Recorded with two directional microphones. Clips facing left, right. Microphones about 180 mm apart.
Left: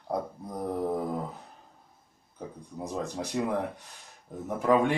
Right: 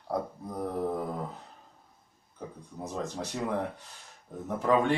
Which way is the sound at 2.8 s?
10° left (ahead or behind).